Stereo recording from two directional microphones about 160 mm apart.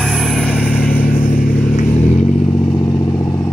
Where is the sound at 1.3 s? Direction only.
55° left (ahead or behind).